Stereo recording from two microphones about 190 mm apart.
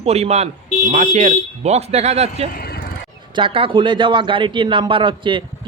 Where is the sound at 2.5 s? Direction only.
55° left (ahead or behind).